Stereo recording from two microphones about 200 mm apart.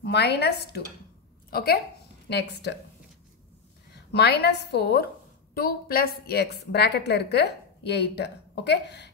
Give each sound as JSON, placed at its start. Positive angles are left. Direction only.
{"t": 0.0, "sound": "a woman's voice", "side_deg": 55}
{"t": 3.9, "sound": "a woman's voice", "side_deg": 55}